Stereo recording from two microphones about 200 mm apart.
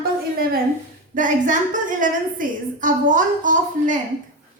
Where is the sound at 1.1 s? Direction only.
40° right (ahead or behind).